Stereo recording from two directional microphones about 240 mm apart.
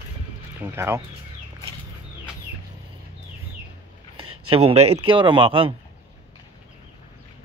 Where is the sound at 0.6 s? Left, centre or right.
Centre.